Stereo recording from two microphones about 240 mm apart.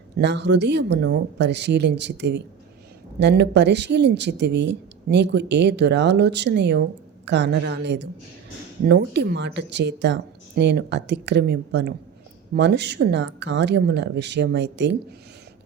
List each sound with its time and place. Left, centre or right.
0.2 s speech: right